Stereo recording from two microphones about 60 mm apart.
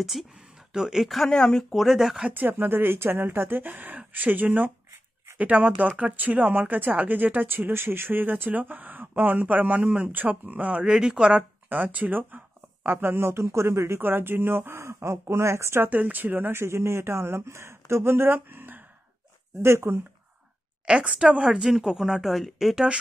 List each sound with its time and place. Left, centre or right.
0.0 s speech: centre
1.3 s speech: centre
2.2 s speech: right; by 11.4 s centre
11.7 s speech: right
15.9 s speech: right
19.6 s speech: right
20.8 s speech: centre